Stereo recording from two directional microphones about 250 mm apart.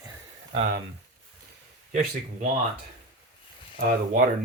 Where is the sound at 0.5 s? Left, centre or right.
Right.